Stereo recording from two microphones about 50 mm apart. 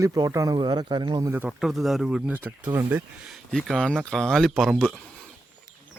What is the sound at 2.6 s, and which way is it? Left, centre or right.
Speech, right.